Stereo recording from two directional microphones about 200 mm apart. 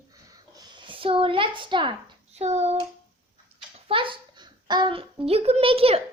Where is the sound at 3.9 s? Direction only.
25° right (ahead or behind).